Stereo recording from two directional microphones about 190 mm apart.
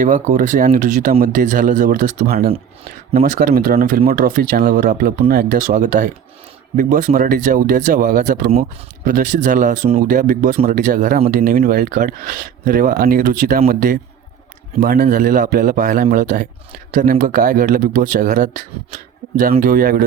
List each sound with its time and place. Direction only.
0.0 s speech: 45° right (ahead or behind)